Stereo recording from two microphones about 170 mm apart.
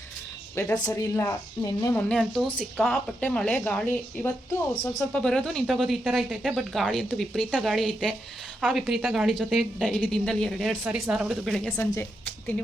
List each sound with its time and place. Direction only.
0.5 s speech: 15° left (ahead or behind)
2.0 s speech: 5° left (ahead or behind)
11.8 s speech: 15° left (ahead or behind)